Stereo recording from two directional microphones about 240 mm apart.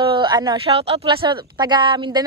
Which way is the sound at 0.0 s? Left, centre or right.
Centre.